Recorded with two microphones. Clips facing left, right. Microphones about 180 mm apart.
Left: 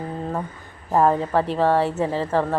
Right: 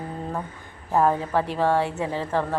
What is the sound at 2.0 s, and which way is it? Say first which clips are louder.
Speech: left 4 dB; 35° left (ahead or behind).